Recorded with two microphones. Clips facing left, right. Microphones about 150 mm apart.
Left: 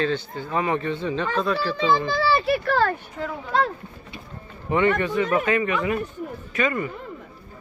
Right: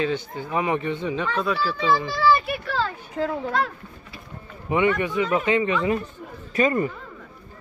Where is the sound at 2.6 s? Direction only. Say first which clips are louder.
Left 5 dB; 60° left (ahead or behind).